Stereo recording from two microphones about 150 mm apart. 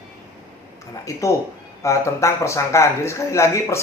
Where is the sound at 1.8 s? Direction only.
20° left (ahead or behind).